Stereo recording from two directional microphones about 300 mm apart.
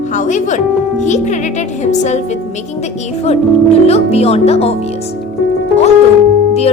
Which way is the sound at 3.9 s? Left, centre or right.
Left.